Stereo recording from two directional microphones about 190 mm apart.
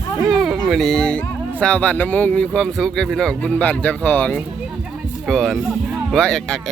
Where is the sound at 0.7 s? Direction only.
Centre (ahead or behind).